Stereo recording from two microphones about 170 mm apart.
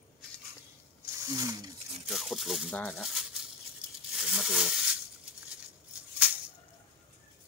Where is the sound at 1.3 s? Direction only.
20° right (ahead or behind).